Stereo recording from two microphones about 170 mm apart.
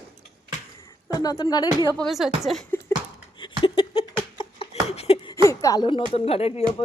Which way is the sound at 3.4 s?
30° left (ahead or behind).